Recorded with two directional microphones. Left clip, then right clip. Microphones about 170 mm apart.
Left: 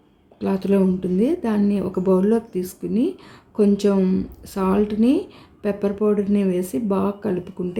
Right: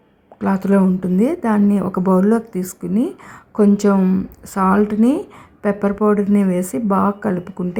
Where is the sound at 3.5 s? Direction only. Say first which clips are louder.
Right 3 dB; 15° right (ahead or behind).